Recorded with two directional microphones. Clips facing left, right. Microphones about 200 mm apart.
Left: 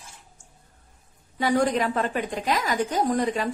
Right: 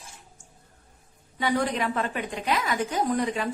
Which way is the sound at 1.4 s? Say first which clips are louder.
Left 4 dB; 40° left (ahead or behind).